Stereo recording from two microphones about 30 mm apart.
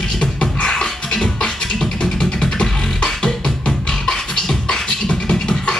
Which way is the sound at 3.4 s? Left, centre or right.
Left.